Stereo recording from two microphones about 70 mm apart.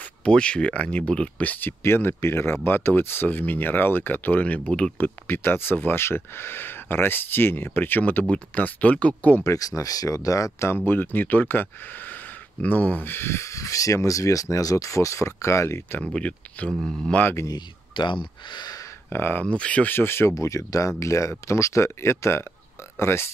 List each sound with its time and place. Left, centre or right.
0.2 s speech: centre
1.5 s speech: left; by 4.9 s centre
4.9 s speech: left
9.4 s speech: left
10.9 s speech: left
16.1 s speech: centre
16.8 s speech: centre
17.1 s speech: left
18.5 s a sound: left
19.0 s speech: left
19.4 s speech: centre
19.9 s speech: left
20.3 s speech: left